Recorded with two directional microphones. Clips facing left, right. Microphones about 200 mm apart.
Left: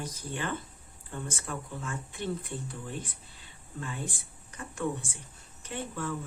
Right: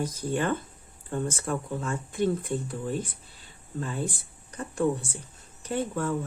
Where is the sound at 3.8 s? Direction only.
40° right (ahead or behind).